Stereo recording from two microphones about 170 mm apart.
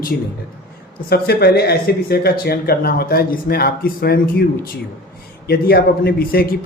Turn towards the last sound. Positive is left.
turn(degrees=65)  # may be behind; listen again after turning